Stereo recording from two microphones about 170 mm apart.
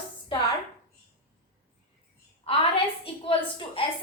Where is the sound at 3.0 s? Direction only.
30° left (ahead or behind).